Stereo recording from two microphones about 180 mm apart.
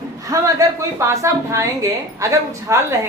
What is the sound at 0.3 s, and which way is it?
A woman's voice, 15° right (ahead or behind).